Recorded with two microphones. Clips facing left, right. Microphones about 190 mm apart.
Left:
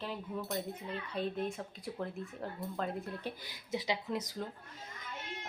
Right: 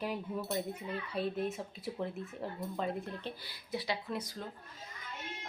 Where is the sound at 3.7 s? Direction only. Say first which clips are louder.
Left 1 dB; 20° left (ahead or behind).